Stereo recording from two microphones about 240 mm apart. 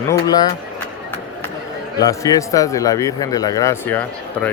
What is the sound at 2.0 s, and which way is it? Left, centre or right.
A man's voice, centre.